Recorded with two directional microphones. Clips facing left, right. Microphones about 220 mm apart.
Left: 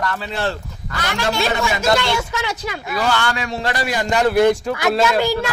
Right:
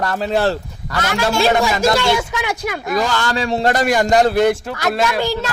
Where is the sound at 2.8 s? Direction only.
40° right (ahead or behind).